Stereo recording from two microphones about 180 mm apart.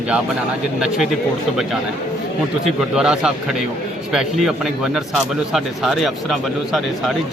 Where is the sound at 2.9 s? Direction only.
5° right (ahead or behind).